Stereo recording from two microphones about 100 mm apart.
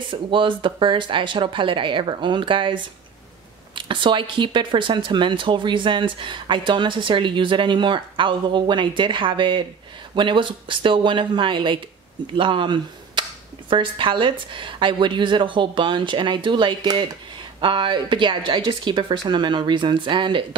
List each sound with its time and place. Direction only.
0.1 s speech: 55° right (ahead or behind)